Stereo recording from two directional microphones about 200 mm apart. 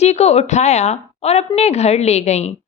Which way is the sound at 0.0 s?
35° left (ahead or behind).